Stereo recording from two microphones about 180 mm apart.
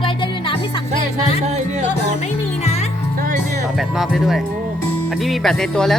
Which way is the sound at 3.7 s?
Centre (ahead or behind).